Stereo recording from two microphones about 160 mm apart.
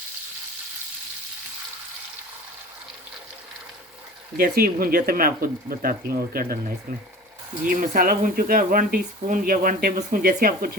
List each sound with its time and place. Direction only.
4.4 s speech: 70° right (ahead or behind)
7.6 s speech: 55° right (ahead or behind)